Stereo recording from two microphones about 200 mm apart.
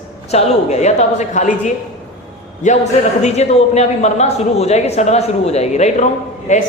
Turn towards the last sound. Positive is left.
turn(degrees=35)  # may be behind; listen again after turning